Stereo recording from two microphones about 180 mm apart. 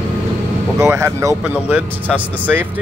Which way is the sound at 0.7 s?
15° right (ahead or behind).